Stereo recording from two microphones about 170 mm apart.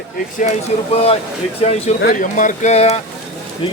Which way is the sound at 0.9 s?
35° left (ahead or behind).